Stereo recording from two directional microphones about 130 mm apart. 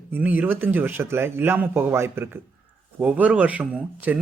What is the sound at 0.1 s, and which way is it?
Speech, 15° right (ahead or behind).